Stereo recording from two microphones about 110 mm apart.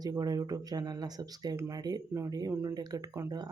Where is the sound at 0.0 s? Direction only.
35° right (ahead or behind).